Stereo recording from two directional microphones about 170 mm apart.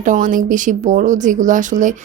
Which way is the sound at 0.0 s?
50° right (ahead or behind).